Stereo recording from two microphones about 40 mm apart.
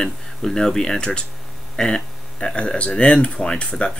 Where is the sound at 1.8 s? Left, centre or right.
Centre.